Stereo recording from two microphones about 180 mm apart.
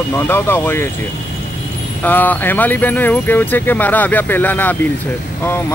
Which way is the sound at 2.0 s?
10° left (ahead or behind).